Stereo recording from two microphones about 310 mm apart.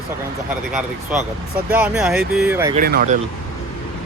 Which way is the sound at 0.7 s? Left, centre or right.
Centre.